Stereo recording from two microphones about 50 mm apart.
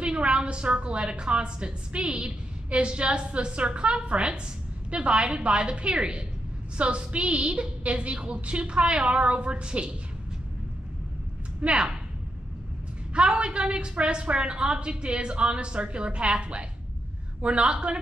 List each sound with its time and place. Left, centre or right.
0.0 s a woman's voice: centre
11.6 s speech: centre
13.1 s a woman's voice: centre